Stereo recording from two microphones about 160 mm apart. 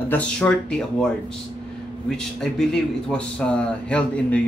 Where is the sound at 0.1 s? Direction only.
5° left (ahead or behind).